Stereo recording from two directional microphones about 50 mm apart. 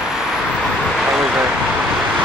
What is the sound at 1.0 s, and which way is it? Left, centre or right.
Vehicle, centre.